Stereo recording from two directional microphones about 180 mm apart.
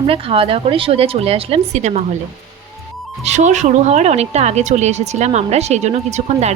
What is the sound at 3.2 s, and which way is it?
Speech, 40° right (ahead or behind).